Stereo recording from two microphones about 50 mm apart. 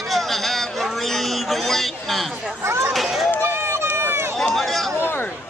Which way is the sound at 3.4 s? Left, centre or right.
Right.